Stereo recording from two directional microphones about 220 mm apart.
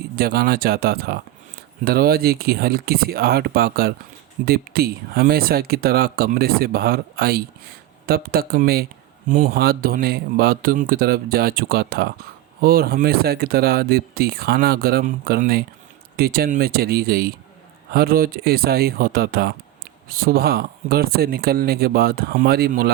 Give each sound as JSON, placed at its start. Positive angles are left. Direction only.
{"t": 0.2, "sound": "speech", "side_deg": -45}